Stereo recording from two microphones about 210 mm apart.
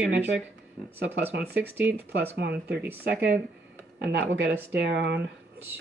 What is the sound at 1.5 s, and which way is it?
Speech, 10° right (ahead or behind).